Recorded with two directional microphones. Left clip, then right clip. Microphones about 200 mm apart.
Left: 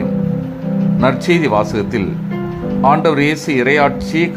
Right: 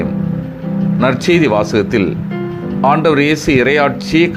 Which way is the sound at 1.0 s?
10° right (ahead or behind).